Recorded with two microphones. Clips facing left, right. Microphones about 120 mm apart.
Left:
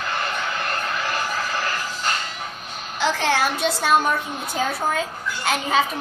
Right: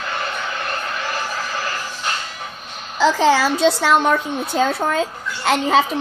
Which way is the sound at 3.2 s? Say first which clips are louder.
Right 6 dB; 90° right.